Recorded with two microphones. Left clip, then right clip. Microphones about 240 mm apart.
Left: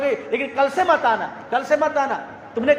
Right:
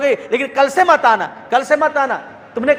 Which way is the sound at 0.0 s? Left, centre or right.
Right.